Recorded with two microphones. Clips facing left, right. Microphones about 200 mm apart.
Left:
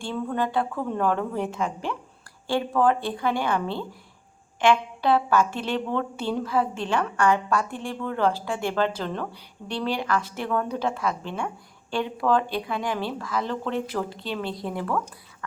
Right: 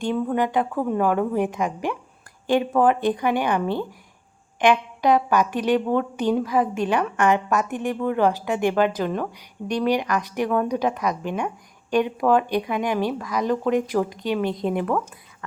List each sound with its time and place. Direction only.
0.0 s a woman's voice: 15° right (ahead or behind)